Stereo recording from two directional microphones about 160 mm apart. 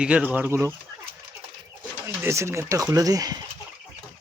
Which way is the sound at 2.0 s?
15° right (ahead or behind).